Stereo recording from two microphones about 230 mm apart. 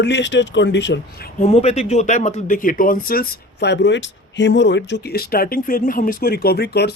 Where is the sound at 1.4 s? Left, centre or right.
Left.